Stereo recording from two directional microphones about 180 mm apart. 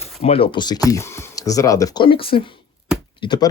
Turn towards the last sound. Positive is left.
turn(degrees=25)  # may be behind; listen again after turning